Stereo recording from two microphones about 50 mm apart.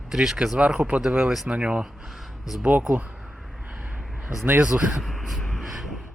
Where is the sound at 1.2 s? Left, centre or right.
Centre.